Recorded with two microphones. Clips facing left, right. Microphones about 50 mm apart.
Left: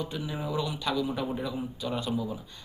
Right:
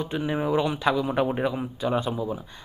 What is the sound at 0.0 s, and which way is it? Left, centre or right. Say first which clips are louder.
A man's voice: right 7 dB; right.